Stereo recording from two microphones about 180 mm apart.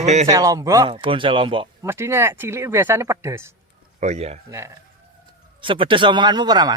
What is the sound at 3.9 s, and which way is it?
Speech, 40° right (ahead or behind).